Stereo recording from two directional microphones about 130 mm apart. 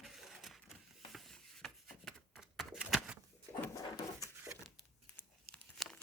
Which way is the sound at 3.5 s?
20° left (ahead or behind).